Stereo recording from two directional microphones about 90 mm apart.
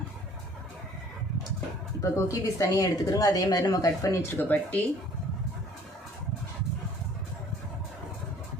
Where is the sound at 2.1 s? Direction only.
40° left (ahead or behind).